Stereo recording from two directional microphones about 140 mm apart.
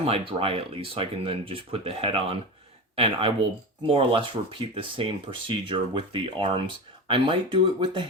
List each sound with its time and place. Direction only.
0.0 s speech: 45° right (ahead or behind)